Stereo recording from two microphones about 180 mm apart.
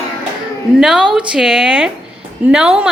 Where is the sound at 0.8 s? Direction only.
5° right (ahead or behind).